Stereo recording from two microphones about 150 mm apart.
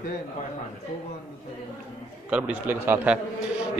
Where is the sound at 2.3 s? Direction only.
10° right (ahead or behind).